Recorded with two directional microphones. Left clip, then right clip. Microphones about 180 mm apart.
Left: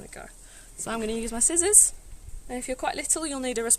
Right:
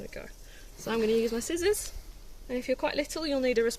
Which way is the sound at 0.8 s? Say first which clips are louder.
Right 4 dB; 55° left (ahead or behind).